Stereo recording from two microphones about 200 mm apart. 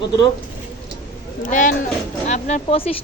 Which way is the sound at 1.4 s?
40° left (ahead or behind).